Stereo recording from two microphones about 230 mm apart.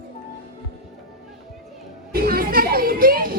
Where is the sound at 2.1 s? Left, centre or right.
Right.